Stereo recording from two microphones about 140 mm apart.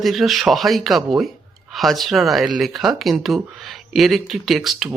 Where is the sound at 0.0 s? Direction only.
Centre (ahead or behind).